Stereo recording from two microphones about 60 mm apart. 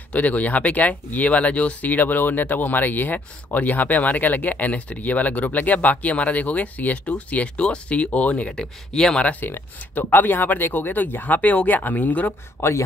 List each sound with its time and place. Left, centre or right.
0.1 s speech: left
9.2 s speech: left
12.5 s speech: left